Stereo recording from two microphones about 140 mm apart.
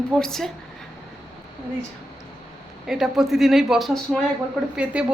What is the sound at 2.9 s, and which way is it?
A woman's voice, 5° right (ahead or behind).